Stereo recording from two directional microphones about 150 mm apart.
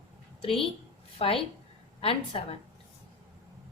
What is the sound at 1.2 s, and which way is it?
A woman's voice, 40° left (ahead or behind).